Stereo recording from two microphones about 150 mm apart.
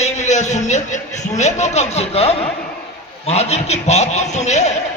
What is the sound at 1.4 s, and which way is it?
A man's voice, 50° left (ahead or behind).